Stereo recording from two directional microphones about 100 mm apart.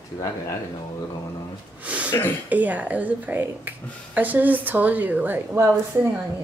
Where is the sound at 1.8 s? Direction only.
15° right (ahead or behind).